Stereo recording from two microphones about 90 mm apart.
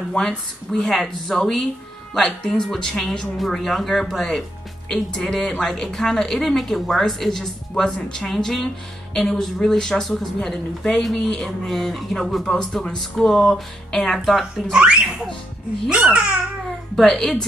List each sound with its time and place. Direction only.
0.1 s speech: 10° left (ahead or behind); by 16.3 s 10° right (ahead or behind)
16.9 s speech: 5° left (ahead or behind)